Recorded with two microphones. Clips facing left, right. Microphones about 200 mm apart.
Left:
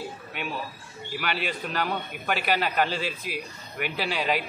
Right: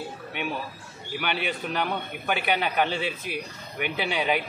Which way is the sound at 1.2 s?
Centre (ahead or behind).